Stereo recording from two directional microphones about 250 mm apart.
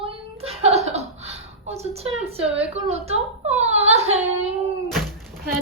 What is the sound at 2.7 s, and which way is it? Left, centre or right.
Whimper, right.